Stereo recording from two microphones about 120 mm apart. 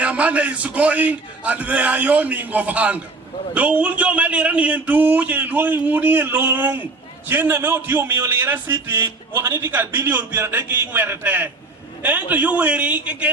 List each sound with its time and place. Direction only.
0.0 s a man's voice: 10° right (ahead or behind)